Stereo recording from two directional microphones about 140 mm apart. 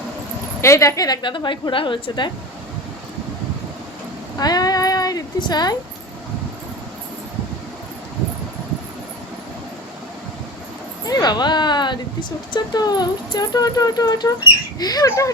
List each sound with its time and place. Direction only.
0.6 s a woman's voice: 20° left (ahead or behind)
4.4 s speech: 30° left (ahead or behind)
11.0 s a sound: 30° left (ahead or behind)
12.5 s speech: 30° left (ahead or behind)